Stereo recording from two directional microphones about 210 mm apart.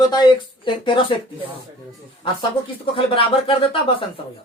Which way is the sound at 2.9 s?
25° left (ahead or behind).